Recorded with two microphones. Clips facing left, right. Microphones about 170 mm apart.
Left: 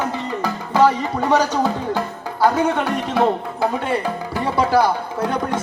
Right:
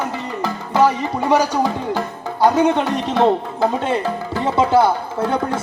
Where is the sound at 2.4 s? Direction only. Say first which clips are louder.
Right 3 dB; 20° right (ahead or behind).